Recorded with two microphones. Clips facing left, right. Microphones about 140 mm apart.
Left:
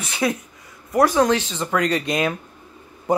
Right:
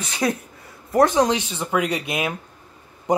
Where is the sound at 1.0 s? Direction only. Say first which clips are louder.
Even; 20° right (ahead or behind).